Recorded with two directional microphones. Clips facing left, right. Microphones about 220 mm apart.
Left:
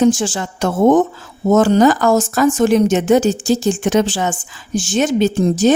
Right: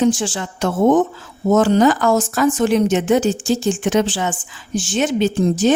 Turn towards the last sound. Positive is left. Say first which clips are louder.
# left 2 dB
turn(degrees=40)  # may be behind; listen again after turning